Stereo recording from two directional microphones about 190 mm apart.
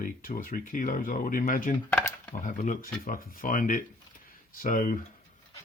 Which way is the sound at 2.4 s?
45° left (ahead or behind).